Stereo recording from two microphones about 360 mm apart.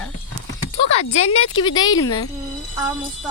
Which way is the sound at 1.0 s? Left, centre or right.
Left.